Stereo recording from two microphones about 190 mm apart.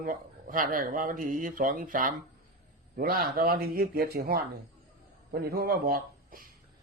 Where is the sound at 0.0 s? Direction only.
45° right (ahead or behind).